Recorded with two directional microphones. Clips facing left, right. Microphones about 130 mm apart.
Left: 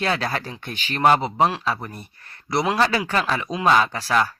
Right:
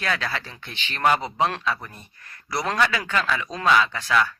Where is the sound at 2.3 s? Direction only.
25° left (ahead or behind).